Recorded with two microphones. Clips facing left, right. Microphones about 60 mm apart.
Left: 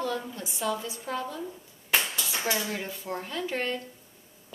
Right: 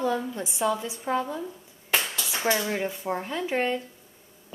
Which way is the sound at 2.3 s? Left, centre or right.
Centre.